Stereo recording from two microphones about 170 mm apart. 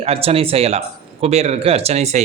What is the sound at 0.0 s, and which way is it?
A man's voice, 35° right (ahead or behind).